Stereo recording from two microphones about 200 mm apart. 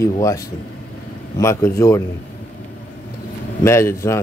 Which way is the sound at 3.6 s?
15° left (ahead or behind).